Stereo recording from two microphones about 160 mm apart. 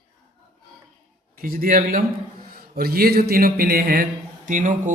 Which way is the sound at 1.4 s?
60° right (ahead or behind).